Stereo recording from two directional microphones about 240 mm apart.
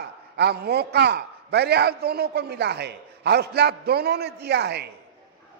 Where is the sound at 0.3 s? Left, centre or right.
Right.